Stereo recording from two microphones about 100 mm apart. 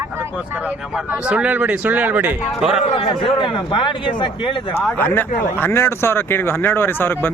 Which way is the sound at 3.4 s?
55° left (ahead or behind).